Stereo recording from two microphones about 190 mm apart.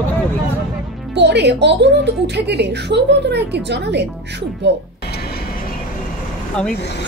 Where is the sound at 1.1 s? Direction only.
65° right (ahead or behind).